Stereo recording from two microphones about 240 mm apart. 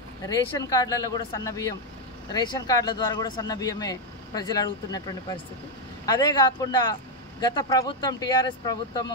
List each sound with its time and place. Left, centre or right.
0.3 s speech: centre